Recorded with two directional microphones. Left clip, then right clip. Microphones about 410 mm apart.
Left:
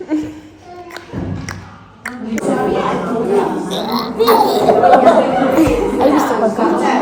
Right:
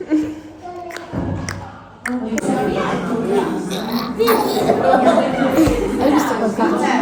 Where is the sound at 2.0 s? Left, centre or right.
Centre.